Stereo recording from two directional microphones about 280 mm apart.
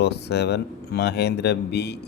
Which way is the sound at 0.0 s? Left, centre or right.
Left.